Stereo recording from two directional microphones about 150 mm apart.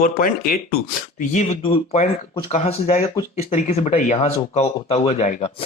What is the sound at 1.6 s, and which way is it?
Speech, 35° left (ahead or behind).